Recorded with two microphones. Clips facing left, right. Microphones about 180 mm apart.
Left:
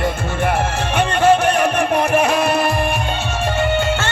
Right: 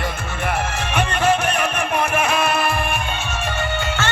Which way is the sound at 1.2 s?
35° left (ahead or behind).